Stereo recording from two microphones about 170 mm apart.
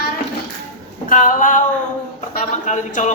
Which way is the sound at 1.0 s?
50° left (ahead or behind).